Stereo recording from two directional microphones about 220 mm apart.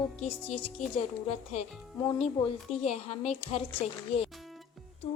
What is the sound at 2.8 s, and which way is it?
Speech, 30° left (ahead or behind).